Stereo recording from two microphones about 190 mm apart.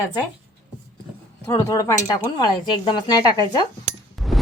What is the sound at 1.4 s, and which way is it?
Speech, 15° left (ahead or behind).